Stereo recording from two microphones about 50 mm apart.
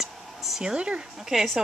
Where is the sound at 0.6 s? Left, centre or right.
Centre.